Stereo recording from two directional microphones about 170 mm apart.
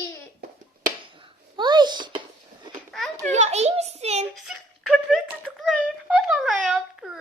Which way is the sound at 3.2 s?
45° right (ahead or behind).